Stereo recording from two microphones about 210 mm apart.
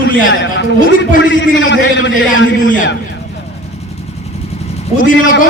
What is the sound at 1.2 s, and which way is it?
A man's voice, 60° left (ahead or behind).